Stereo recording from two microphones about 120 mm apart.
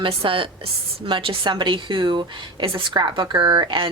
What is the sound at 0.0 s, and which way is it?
A woman's voice, 50° right (ahead or behind).